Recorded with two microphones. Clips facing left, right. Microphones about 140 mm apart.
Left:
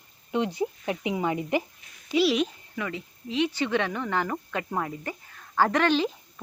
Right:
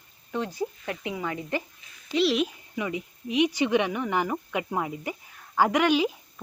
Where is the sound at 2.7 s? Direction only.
15° right (ahead or behind).